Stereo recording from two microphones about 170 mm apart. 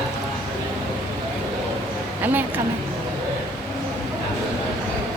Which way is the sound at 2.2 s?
10° right (ahead or behind).